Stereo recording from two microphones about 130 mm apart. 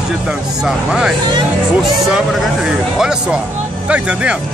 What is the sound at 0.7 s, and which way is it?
Speech, 5° right (ahead or behind).